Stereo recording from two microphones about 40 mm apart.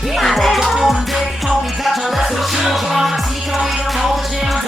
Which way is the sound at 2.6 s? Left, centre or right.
Centre.